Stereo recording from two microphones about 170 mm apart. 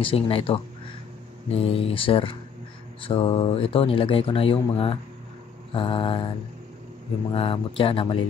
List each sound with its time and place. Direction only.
0.0 s speech: 35° left (ahead or behind)
7.3 s speech: 30° left (ahead or behind)